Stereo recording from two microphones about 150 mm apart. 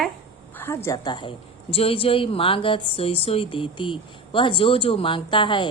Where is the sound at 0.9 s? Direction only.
25° left (ahead or behind).